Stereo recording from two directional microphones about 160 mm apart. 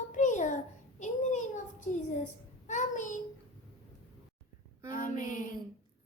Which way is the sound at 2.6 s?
50° left (ahead or behind).